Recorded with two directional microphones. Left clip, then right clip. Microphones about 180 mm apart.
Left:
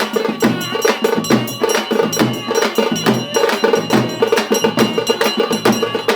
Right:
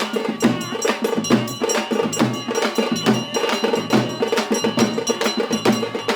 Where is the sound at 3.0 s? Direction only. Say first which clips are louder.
Left 5 dB; 25° left (ahead or behind).